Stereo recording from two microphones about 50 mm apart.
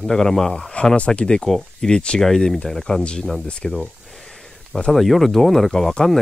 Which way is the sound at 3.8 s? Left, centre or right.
Centre.